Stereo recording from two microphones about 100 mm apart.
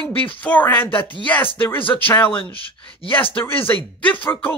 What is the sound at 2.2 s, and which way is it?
Speech, 65° left (ahead or behind).